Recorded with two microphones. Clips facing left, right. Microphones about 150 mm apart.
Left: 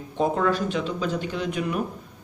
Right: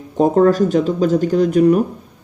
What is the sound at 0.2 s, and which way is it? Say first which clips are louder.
Speech: right 10 dB; 40° right (ahead or behind).